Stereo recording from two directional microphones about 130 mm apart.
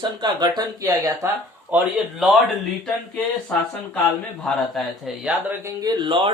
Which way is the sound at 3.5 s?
5° left (ahead or behind).